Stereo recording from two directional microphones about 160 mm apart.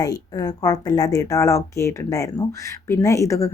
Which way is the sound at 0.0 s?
25° left (ahead or behind).